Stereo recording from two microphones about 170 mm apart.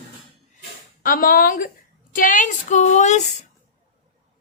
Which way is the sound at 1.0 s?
60° left (ahead or behind).